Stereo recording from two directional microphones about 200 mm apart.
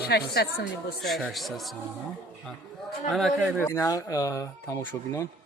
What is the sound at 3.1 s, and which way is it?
Speech, centre (ahead or behind).